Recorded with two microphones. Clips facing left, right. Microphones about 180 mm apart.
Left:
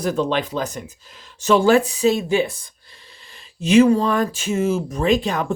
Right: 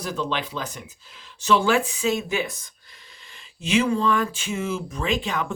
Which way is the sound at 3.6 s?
40° left (ahead or behind).